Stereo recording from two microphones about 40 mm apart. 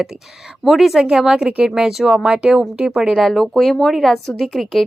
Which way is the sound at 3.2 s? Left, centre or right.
Centre.